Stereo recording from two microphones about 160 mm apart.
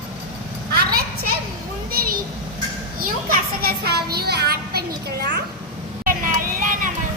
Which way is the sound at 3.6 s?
75° right (ahead or behind).